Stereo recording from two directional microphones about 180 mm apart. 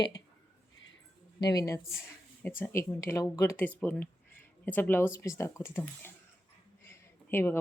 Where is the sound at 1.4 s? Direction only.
20° left (ahead or behind).